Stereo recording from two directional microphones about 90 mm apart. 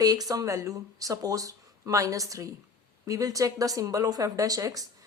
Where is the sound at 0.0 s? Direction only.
45° right (ahead or behind).